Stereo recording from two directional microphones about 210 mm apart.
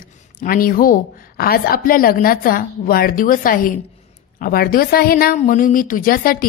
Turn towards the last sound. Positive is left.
turn(degrees=40)  # may be behind; listen again after turning